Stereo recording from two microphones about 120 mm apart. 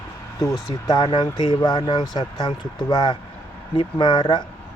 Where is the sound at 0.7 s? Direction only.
30° left (ahead or behind).